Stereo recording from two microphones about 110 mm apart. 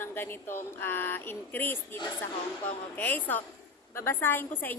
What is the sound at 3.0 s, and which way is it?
A woman's voice, 15° left (ahead or behind).